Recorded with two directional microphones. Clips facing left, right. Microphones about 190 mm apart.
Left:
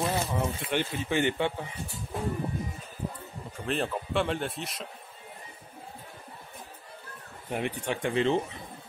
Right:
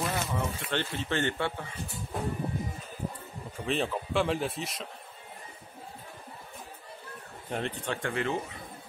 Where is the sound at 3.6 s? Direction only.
Centre (ahead or behind).